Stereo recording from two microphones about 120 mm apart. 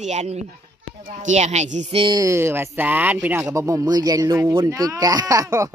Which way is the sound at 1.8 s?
50° right (ahead or behind).